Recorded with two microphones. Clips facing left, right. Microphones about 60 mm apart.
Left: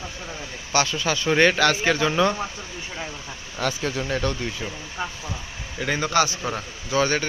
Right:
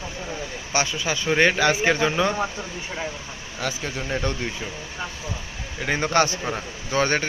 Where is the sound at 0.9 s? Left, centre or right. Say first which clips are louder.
Left 1 dB; centre.